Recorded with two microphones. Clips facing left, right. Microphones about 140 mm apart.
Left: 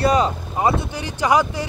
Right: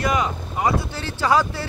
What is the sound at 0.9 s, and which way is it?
Speech, 15° left (ahead or behind).